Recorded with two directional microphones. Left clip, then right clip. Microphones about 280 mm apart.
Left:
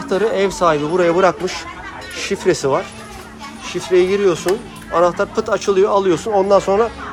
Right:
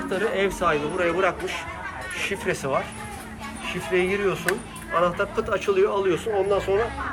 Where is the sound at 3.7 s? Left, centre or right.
Centre.